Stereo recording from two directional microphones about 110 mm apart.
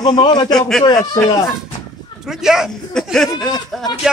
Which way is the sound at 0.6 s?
5° left (ahead or behind).